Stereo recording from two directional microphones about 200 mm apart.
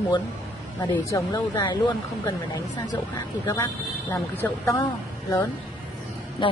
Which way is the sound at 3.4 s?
15° left (ahead or behind).